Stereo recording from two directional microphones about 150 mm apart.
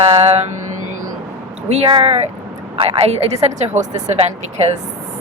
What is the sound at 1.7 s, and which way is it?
Mantra, 40° right (ahead or behind).